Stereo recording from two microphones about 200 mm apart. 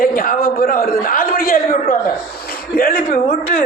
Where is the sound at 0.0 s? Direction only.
45° left (ahead or behind).